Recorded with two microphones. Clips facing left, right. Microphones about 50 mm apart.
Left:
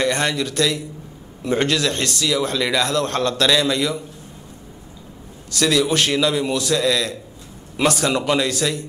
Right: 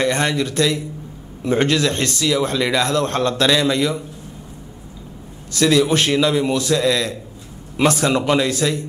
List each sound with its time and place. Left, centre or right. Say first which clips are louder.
0.0 s a man's voice: right 2 dB; right
5.5 s a man's voice: right 3 dB; right